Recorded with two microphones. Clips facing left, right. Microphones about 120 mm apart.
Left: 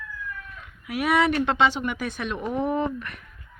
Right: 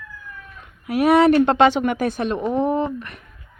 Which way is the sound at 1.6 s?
55° right (ahead or behind).